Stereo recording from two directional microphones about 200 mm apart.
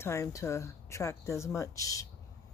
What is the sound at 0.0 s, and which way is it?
Speech, 15° left (ahead or behind).